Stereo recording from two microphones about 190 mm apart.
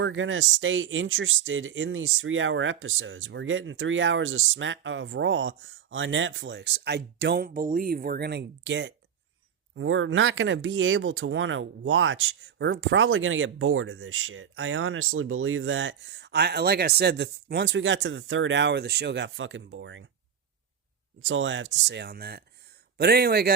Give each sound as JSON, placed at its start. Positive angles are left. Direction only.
{"t": 0.0, "sound": "speech", "side_deg": -90}
{"t": 9.7, "sound": "speech", "side_deg": -90}
{"t": 21.2, "sound": "speech", "side_deg": -90}